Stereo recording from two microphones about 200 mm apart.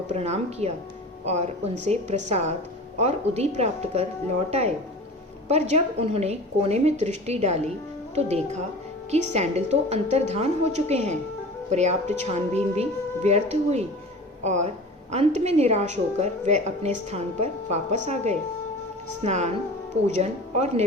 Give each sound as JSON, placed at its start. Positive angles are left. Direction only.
{"t": 0.1, "sound": "a woman's voice", "side_deg": -35}
{"t": 5.5, "sound": "a woman's voice", "side_deg": -35}